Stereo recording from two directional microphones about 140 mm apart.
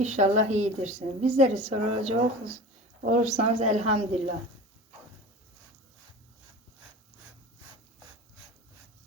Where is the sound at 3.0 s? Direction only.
65° right (ahead or behind); by 4.2 s 50° right (ahead or behind).